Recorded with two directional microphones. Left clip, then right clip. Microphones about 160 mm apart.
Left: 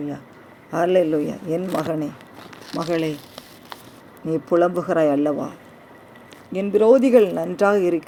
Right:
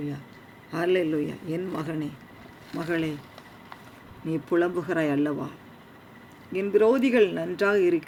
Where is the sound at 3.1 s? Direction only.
90° left.